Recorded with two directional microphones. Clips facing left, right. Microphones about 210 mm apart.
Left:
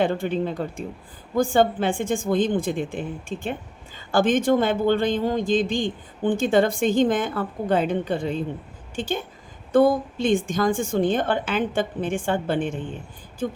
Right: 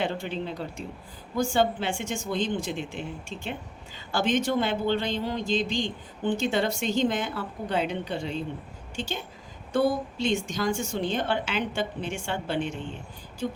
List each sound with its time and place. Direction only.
0.0 s speech: 50° left (ahead or behind)